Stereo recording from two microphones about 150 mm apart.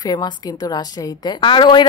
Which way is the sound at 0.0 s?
25° left (ahead or behind).